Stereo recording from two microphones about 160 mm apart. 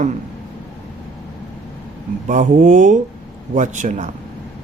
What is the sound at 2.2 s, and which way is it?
Speech, 50° right (ahead or behind).